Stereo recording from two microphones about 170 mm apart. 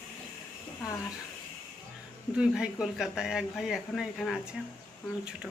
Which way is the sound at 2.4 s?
5° right (ahead or behind).